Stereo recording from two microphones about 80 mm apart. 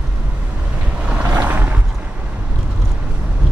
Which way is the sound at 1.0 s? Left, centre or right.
Centre.